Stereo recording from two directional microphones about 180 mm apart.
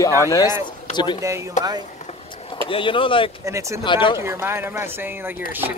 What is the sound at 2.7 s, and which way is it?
Speech, 30° left (ahead or behind).